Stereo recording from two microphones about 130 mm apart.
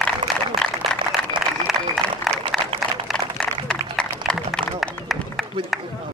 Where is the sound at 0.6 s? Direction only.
5° left (ahead or behind).